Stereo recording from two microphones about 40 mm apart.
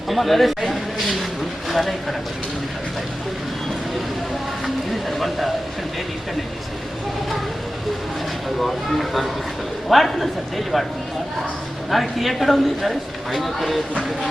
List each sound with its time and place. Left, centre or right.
0.1 s speech: centre
4.6 s a sound: centre
8.6 s speech: centre
11.9 s speech: centre